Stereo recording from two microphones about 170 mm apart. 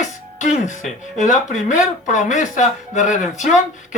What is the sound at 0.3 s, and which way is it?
Music, 45° left (ahead or behind).